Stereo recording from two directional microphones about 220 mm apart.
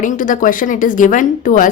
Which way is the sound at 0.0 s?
35° left (ahead or behind).